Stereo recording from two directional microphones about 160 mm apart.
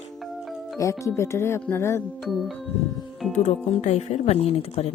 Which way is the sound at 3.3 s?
45° left (ahead or behind).